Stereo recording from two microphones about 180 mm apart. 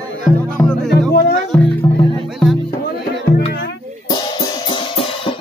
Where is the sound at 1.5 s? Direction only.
5° left (ahead or behind).